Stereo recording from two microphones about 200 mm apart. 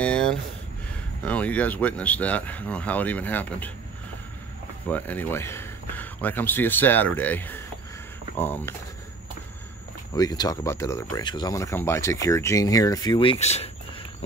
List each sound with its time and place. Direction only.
0.0 s a sound: 5° left (ahead or behind)
1.2 s speech: 5° left (ahead or behind)
4.8 s speech: 10° left (ahead or behind)
10.1 s speech: 20° left (ahead or behind)